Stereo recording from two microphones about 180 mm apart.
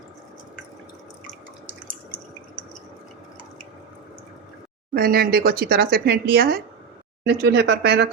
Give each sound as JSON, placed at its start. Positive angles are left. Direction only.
{"t": 4.9, "sound": "speech", "side_deg": -55}
{"t": 7.3, "sound": "speech", "side_deg": -70}